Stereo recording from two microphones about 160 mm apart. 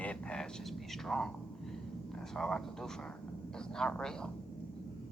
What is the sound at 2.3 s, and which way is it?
Speech, 5° left (ahead or behind).